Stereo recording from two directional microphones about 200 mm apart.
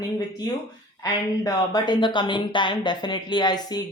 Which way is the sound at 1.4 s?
20° left (ahead or behind).